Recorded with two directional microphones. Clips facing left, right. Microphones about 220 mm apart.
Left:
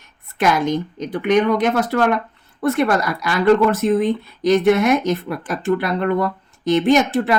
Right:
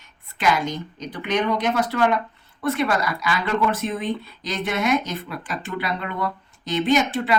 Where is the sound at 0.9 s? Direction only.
55° left (ahead or behind).